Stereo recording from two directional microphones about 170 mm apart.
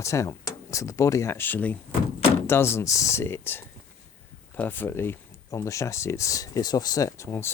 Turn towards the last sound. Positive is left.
turn(degrees=15)  # may be behind; listen again after turning